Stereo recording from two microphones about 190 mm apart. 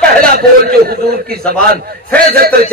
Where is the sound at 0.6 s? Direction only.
55° right (ahead or behind).